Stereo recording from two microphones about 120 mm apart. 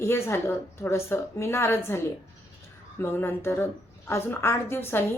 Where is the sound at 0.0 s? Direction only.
20° left (ahead or behind).